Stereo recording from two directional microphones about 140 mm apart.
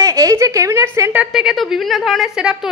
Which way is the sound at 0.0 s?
25° right (ahead or behind).